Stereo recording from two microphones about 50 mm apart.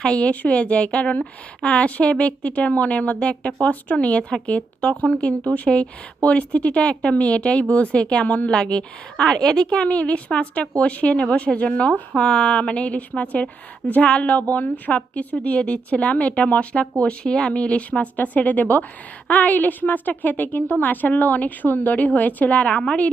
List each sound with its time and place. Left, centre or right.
0.0 s a woman's voice: left